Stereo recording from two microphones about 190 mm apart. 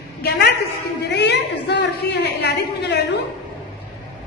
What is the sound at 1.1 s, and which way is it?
A woman's voice, 65° left (ahead or behind).